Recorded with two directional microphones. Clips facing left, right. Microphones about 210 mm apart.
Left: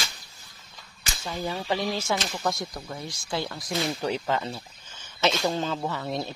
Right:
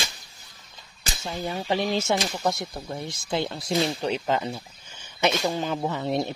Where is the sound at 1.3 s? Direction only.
20° right (ahead or behind).